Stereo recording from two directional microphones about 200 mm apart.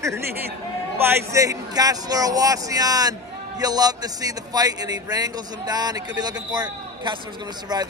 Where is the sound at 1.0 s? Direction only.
15° right (ahead or behind).